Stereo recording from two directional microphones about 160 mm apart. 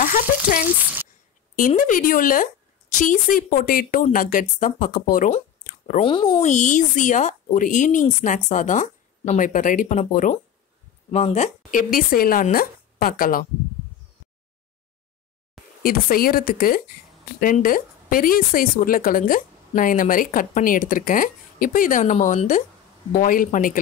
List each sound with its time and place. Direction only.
0.0 s speech: 60° left (ahead or behind)
1.8 s a woman's voice: 60° left (ahead or behind)
5.6 s a sound: 55° left (ahead or behind)
5.9 s speech: 30° left (ahead or behind)
6.4 s a woman's voice: 50° left (ahead or behind)
15.8 s a woman's voice: 65° left (ahead or behind)